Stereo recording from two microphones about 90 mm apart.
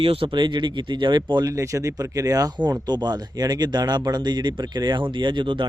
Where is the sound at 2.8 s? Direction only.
50° right (ahead or behind).